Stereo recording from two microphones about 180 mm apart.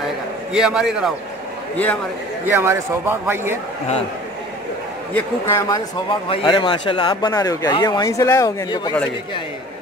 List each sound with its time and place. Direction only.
0.5 s a man's voice: 5° right (ahead or behind)
2.4 s speech: 10° right (ahead or behind)
5.1 s a man's voice: 15° left (ahead or behind)
6.0 s speech: 30° left (ahead or behind)